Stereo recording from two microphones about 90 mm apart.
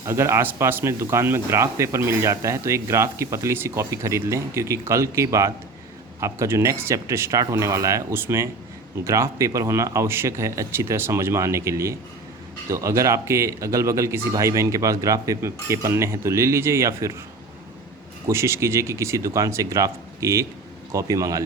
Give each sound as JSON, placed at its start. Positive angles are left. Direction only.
{"t": 0.0, "sound": "speech", "side_deg": -30}
{"t": 18.3, "sound": "speech", "side_deg": -30}